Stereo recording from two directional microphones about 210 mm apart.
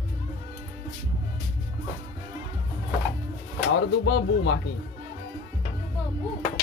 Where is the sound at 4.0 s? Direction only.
60° left (ahead or behind).